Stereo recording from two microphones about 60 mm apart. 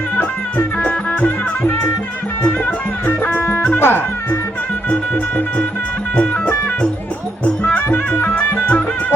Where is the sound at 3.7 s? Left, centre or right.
Left.